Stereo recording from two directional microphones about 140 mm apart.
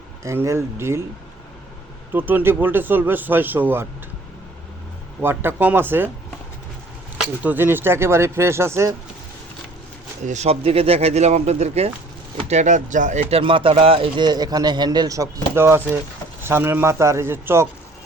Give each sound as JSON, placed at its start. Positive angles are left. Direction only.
{"t": 0.3, "sound": "speech", "side_deg": -20}
{"t": 2.1, "sound": "a man's voice", "side_deg": -15}
{"t": 5.2, "sound": "a man's voice", "side_deg": -15}
{"t": 7.4, "sound": "speech", "side_deg": -15}
{"t": 10.2, "sound": "speech", "side_deg": -55}
{"t": 13.3, "sound": "a man's voice", "side_deg": -40}